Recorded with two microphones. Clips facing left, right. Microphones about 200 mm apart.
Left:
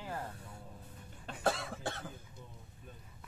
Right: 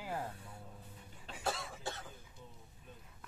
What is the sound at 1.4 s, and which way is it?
Cough, 60° left (ahead or behind).